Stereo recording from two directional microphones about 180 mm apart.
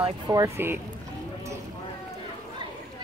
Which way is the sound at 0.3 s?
15° right (ahead or behind).